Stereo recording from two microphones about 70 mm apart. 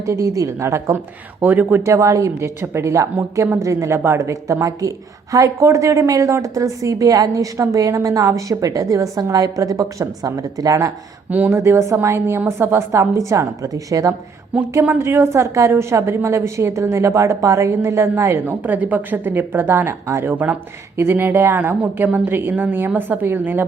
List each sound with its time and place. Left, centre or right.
0.0 s a woman's voice: right
1.4 s a woman's voice: right
1.8 s a woman's voice: right
11.3 s a woman's voice: right
11.5 s a woman's voice: right
14.8 s a woman's voice: right
15.1 s a woman's voice: right
18.3 s a woman's voice: right
20.3 s a woman's voice: right
20.9 s a woman's voice: right